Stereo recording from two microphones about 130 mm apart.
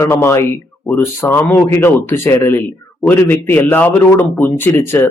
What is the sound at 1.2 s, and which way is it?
A man's voice, 15° left (ahead or behind).